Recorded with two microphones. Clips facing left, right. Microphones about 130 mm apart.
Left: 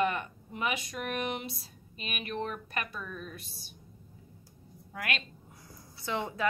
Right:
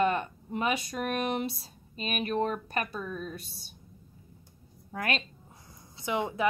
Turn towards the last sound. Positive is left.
turn(degrees=-15)  # may be behind; listen again after turning